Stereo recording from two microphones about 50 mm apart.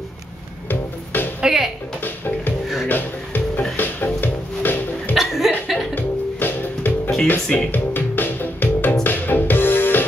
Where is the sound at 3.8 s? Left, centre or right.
Left.